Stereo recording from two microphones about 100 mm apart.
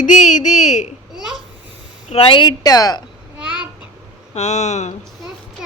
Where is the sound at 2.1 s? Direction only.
65° left (ahead or behind).